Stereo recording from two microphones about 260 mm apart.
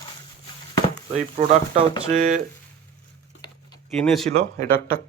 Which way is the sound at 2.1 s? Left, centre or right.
Right.